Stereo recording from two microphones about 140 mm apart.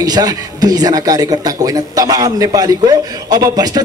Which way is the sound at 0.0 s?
25° right (ahead or behind).